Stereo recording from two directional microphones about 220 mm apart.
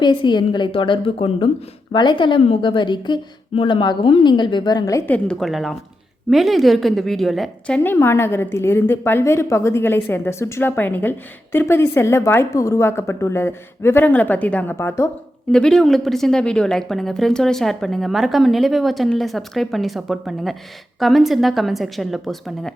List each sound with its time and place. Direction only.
0.0 s a woman's voice: 20° left (ahead or behind); by 22.7 s centre (ahead or behind)